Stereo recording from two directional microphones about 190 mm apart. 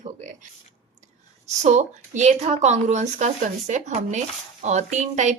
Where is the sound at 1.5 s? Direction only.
40° right (ahead or behind).